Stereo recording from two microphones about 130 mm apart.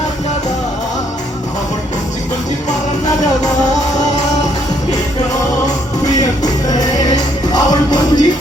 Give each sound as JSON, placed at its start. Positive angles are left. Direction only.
{"t": 6.7, "sound": "music", "side_deg": 30}